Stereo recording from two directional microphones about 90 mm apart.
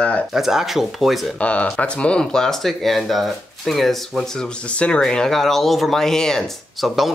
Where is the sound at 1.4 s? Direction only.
15° left (ahead or behind).